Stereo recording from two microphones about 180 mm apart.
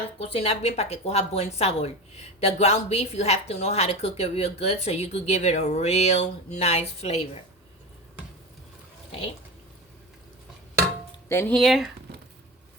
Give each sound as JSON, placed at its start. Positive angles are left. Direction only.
{"t": 0.2, "sound": "a woman's voice", "side_deg": 35}
{"t": 11.3, "sound": "speech", "side_deg": 10}